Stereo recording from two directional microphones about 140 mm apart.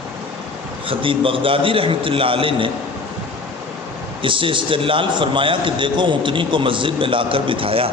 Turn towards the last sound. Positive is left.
turn(degrees=-40)  # may be behind; listen again after turning